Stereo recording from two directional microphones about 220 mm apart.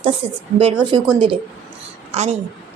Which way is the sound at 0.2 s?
25° right (ahead or behind).